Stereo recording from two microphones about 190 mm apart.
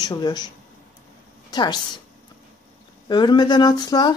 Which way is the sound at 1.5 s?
20° left (ahead or behind).